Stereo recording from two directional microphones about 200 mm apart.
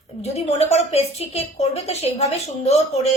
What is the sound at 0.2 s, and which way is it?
A woman's voice, 30° left (ahead or behind).